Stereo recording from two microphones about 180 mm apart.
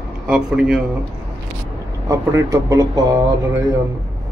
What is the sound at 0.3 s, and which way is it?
Speech, 5° right (ahead or behind).